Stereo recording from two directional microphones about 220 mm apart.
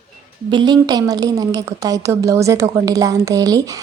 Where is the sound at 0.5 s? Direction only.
20° right (ahead or behind).